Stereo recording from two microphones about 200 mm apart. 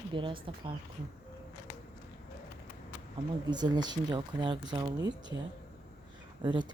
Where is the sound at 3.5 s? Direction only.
20° right (ahead or behind).